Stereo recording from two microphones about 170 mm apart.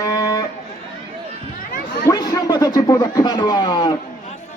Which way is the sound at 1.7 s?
55° left (ahead or behind).